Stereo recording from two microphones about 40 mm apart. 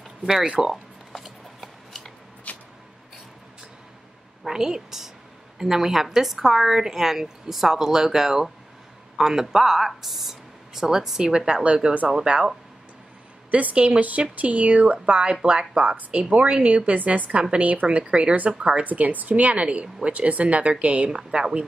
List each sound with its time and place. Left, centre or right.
0.5 s a sound: centre
2.5 s a sound: left
4.5 s a woman's voice: centre; by 12.4 s right
13.5 s speech: right
17.4 s speech: right
18.9 s speech: right